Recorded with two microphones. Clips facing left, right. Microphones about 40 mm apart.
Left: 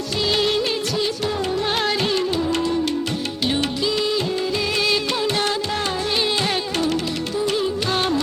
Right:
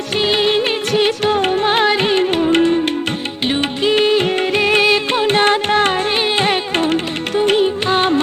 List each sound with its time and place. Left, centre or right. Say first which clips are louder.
0.2 s music: right 5 dB; right
1.6 s music: right 6 dB; right
3.9 s music: right 8 dB; right
4.9 s carnatic music: right 6 dB; right